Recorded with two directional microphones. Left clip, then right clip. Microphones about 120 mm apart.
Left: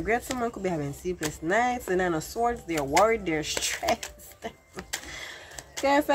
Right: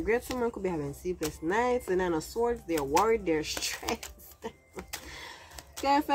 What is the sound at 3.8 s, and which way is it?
Speech, 40° right (ahead or behind).